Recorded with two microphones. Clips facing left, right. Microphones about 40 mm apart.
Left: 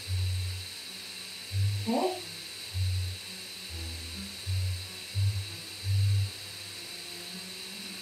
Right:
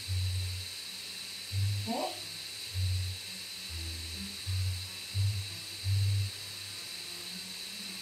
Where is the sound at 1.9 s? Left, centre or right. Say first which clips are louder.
Left 7 dB; left.